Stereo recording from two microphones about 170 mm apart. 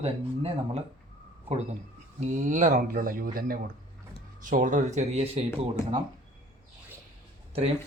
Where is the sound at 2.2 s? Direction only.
50° right (ahead or behind).